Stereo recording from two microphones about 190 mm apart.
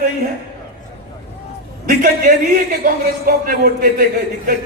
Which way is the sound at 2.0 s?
45° right (ahead or behind).